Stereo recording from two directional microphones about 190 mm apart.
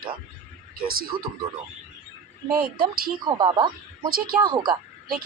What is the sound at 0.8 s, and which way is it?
Speech, 50° right (ahead or behind).